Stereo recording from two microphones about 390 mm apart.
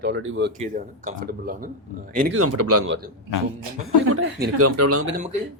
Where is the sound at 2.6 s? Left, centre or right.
Right.